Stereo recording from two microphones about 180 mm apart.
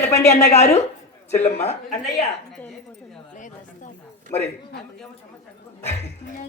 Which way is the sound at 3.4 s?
45° left (ahead or behind).